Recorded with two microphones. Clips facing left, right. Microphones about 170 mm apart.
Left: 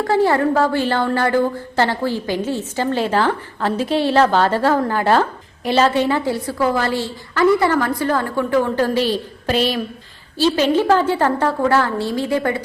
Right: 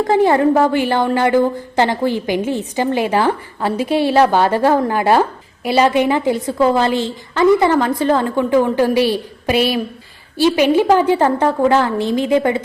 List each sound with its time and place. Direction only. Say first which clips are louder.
0.0 s a woman's voice: right 3 dB; 20° right (ahead or behind)